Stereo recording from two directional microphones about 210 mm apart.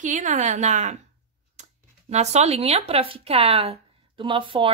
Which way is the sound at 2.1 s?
30° right (ahead or behind).